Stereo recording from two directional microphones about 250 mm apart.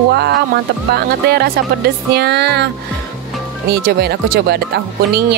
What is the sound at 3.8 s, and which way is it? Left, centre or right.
Speech, right.